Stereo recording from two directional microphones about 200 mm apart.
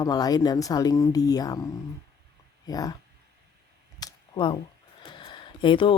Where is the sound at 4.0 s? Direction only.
20° left (ahead or behind).